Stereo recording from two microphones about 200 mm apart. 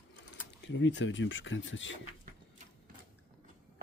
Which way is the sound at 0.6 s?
65° left (ahead or behind).